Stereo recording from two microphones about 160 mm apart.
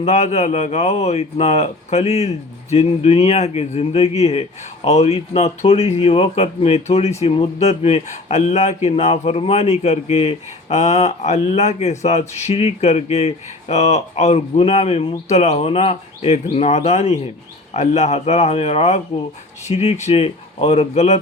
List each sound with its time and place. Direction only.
0.0 s speech: 45° left (ahead or behind)